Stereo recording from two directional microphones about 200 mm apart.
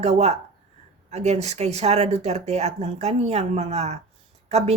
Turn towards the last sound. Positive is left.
turn(degrees=-30)  # may be behind; listen again after turning